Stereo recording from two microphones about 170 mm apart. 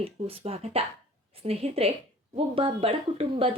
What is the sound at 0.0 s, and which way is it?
A woman's voice, 35° right (ahead or behind).